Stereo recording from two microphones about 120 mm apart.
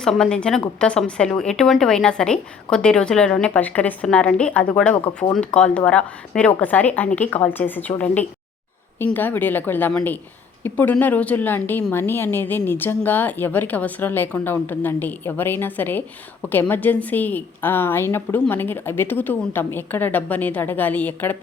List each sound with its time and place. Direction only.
0.0 s a woman's voice: 5° left (ahead or behind)